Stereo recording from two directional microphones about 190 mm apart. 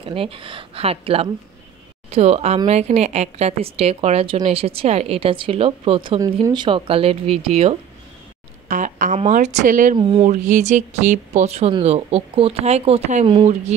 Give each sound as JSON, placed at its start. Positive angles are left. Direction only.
{"t": 0.1, "sound": "speech", "side_deg": -30}
{"t": 9.9, "sound": "speech", "side_deg": -30}
{"t": 10.2, "sound": "speech", "side_deg": -40}